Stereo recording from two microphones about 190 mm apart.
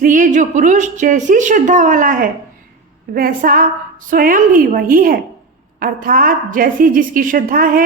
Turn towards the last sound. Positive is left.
turn(degrees=-45)  # may be behind; listen again after turning